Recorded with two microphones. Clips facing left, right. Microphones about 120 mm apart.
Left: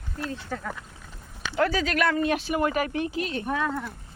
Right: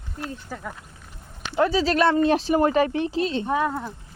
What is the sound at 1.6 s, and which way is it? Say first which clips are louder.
Speech: right 4 dB; 25° right (ahead or behind).